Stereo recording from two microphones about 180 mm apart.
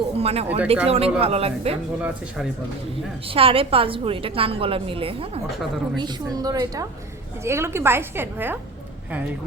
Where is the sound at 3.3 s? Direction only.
30° right (ahead or behind).